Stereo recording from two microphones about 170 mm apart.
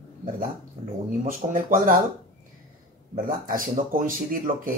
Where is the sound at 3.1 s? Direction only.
55° right (ahead or behind).